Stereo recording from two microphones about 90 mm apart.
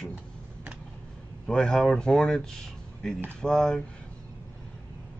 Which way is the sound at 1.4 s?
10° left (ahead or behind).